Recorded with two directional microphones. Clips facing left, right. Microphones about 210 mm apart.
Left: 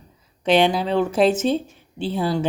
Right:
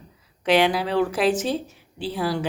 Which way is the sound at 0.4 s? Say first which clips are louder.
Left 2 dB; 25° left (ahead or behind).